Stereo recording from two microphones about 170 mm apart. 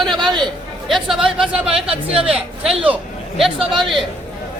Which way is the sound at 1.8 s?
35° right (ahead or behind).